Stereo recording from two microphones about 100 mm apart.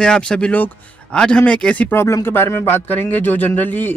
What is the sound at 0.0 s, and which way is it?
Speech, 10° left (ahead or behind).